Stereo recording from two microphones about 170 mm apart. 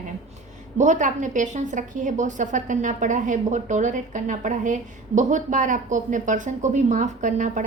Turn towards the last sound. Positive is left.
turn(degrees=-50)  # may be behind; listen again after turning